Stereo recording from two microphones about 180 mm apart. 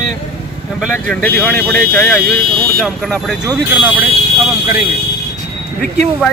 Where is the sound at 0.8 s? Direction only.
5° left (ahead or behind).